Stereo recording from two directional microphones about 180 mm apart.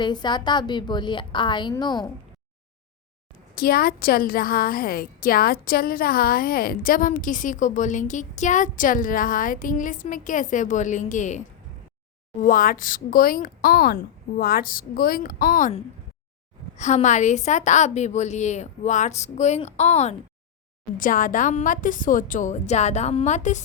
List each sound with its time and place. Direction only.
0.0 s a woman's voice: 25° left (ahead or behind)
3.6 s a woman's voice: 55° left (ahead or behind)
16.7 s a woman's voice: 40° left (ahead or behind)
21.0 s a woman's voice: 50° left (ahead or behind)